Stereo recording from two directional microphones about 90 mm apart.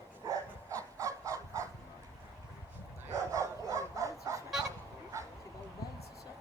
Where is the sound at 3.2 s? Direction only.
35° right (ahead or behind).